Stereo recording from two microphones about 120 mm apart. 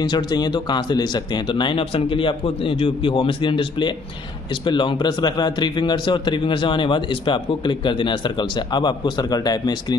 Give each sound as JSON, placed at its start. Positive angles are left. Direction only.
{"t": 0.0, "sound": "a man's voice", "side_deg": 35}